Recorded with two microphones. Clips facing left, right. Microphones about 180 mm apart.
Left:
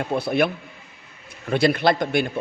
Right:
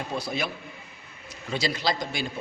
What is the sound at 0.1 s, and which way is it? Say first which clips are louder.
A man's voice: left 11 dB; 60° left (ahead or behind).